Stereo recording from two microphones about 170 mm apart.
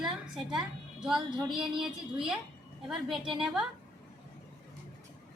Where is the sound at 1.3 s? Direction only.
30° right (ahead or behind).